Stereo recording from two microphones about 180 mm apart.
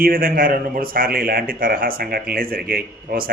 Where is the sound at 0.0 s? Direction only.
55° right (ahead or behind).